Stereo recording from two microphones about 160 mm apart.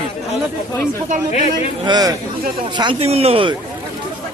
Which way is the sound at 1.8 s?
25° right (ahead or behind).